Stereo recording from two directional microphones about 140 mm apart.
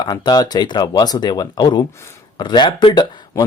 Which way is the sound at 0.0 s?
30° left (ahead or behind).